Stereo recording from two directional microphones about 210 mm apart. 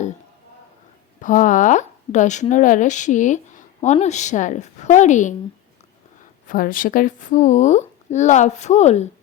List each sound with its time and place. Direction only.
1.2 s speech: 40° left (ahead or behind)
6.5 s speech: 40° left (ahead or behind)